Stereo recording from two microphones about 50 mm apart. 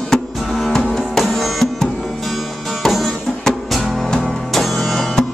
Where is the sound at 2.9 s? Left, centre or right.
Centre.